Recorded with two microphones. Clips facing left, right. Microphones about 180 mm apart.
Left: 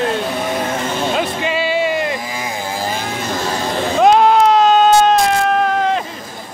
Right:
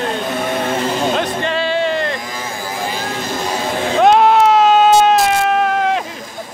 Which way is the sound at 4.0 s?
Centre (ahead or behind).